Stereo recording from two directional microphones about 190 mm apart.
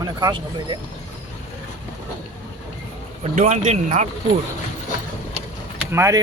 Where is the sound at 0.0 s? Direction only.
20° right (ahead or behind).